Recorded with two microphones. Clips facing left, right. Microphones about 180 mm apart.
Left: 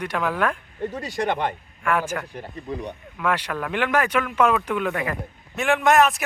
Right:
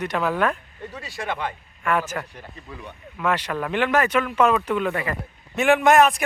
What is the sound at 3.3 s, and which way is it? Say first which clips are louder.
A man's voice: right 1 dB; 10° left (ahead or behind).